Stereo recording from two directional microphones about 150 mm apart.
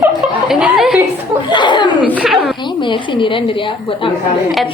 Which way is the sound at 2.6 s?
30° left (ahead or behind).